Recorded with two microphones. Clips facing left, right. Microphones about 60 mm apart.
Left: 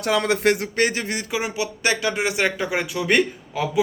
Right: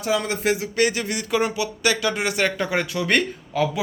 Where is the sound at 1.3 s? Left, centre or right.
Centre.